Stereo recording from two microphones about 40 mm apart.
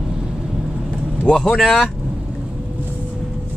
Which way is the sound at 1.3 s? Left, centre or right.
Centre.